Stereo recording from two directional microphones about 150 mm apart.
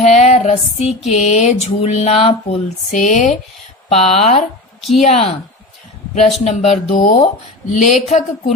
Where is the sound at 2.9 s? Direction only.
55° left (ahead or behind).